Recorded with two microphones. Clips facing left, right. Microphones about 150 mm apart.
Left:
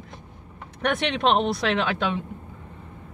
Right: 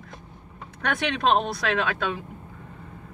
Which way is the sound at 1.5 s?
25° left (ahead or behind).